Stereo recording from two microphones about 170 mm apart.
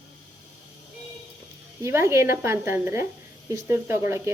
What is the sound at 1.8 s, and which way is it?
A woman's voice, 15° right (ahead or behind).